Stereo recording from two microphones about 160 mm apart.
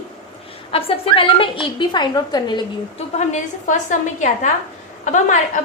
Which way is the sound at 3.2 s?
50° left (ahead or behind).